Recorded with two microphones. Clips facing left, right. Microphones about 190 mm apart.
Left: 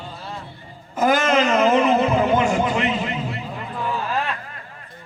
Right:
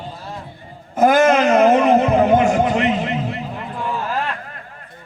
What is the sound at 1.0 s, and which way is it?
Speech, 50° right (ahead or behind).